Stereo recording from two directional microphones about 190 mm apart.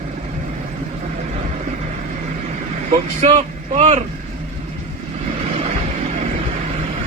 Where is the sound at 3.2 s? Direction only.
35° right (ahead or behind).